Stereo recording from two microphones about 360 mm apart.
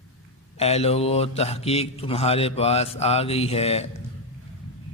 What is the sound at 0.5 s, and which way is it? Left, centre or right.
Mantra, centre.